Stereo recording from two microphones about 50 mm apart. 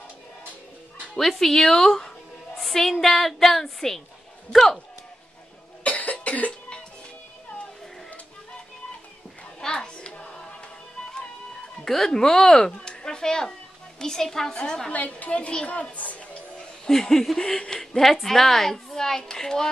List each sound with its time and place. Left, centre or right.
1.1 s a woman's voice: centre
5.9 s cough: left
9.6 s music: centre
11.8 s a woman's voice: centre; by 16.3 s left
16.8 s a woman's voice: centre